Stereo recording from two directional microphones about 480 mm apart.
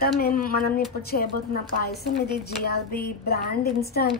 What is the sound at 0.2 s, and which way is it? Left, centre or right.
Speech, centre.